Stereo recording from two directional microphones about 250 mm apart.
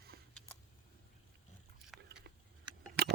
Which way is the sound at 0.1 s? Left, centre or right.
Right.